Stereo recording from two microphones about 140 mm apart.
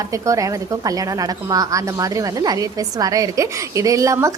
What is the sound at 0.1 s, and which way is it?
A woman's voice, 25° right (ahead or behind).